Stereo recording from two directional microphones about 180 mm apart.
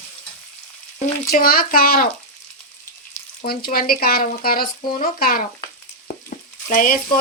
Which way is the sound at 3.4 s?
55° left (ahead or behind).